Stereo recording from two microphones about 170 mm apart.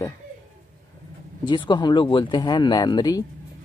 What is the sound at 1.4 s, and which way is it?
Speech, 25° left (ahead or behind).